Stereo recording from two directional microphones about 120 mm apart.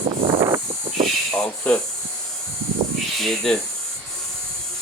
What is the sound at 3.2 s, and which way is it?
Speech, 5° left (ahead or behind).